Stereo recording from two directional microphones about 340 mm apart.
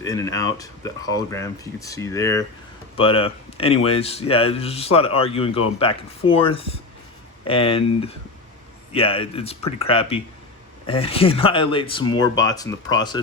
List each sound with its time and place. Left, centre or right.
0.0 s speech: centre